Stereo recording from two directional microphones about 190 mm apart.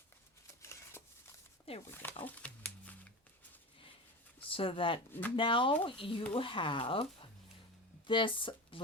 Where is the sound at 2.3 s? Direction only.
5° left (ahead or behind).